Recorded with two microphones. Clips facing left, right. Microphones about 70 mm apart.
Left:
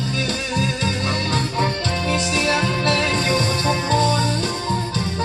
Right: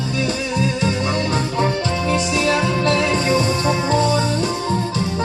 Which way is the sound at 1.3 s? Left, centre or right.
Centre.